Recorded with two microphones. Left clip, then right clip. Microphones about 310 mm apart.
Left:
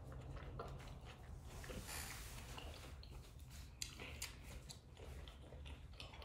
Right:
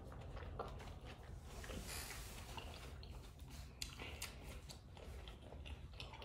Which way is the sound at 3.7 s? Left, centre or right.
Centre.